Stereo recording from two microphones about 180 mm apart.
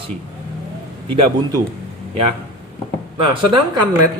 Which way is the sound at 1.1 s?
30° right (ahead or behind).